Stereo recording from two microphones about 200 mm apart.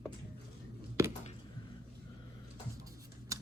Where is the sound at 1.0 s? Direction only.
15° right (ahead or behind).